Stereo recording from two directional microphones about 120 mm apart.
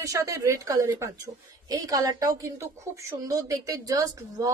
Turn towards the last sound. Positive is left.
turn(degrees=-30)  # may be behind; listen again after turning